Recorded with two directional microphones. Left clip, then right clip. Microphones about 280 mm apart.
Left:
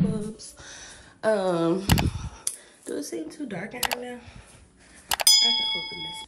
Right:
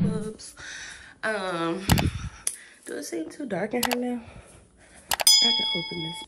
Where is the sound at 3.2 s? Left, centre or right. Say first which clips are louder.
Right 4 dB; centre.